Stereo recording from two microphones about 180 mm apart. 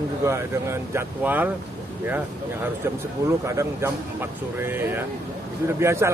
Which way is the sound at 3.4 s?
15° right (ahead or behind).